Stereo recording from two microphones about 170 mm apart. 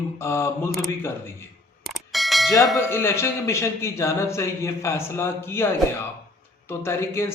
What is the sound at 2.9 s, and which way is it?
A man's voice, 15° left (ahead or behind).